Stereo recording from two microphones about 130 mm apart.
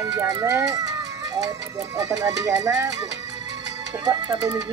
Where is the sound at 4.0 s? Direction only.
30° right (ahead or behind).